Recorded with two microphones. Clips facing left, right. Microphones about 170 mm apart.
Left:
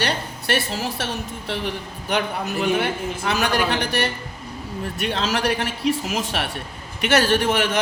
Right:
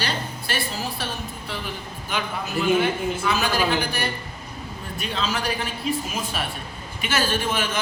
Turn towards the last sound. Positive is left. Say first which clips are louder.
# left 5 dB
turn(degrees=65)  # may be behind; listen again after turning